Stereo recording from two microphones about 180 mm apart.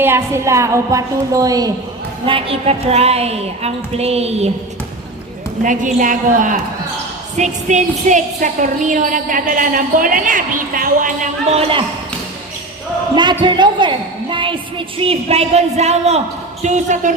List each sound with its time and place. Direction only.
0.0 s a woman's voice: 15° right (ahead or behind); by 4.5 s 35° right (ahead or behind)
5.6 s a woman's voice: 45° right (ahead or behind)
11.4 s a woman's voice: 30° right (ahead or behind)
13.4 s a woman's voice: 25° right (ahead or behind); by 17.2 s 45° right (ahead or behind)